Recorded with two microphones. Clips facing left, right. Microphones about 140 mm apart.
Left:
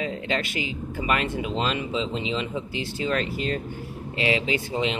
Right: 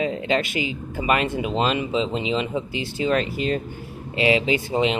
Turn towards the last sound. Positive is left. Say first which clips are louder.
# right 5 dB
turn(degrees=-15)  # may be behind; listen again after turning